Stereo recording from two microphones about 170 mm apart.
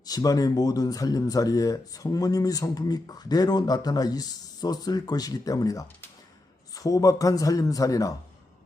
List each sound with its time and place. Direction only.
0.0 s speech: 20° left (ahead or behind)